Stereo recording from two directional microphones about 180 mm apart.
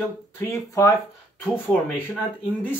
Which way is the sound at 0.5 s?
15° left (ahead or behind).